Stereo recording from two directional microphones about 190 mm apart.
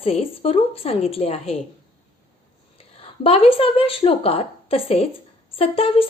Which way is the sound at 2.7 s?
30° left (ahead or behind).